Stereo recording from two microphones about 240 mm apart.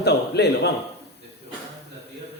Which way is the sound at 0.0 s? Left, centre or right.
Left.